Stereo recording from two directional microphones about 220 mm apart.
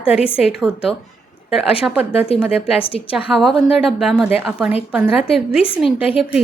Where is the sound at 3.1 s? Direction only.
Centre (ahead or behind).